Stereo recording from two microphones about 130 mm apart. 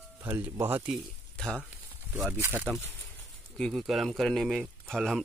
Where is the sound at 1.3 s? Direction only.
5° left (ahead or behind).